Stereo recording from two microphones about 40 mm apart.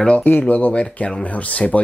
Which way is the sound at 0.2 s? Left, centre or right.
Left.